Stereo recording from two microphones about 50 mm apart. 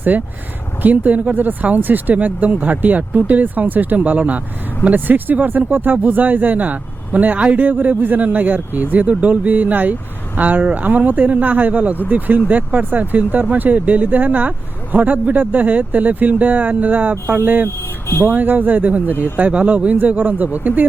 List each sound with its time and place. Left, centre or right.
0.1 s speech: right